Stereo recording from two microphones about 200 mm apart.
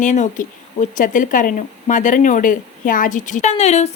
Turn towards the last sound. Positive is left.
turn(degrees=35)  # may be behind; listen again after turning